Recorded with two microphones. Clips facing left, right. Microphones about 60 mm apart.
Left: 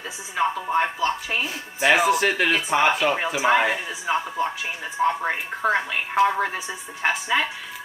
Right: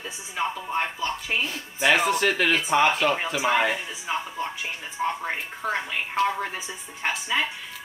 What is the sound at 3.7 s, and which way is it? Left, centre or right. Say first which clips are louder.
Speech: left 4 dB; left.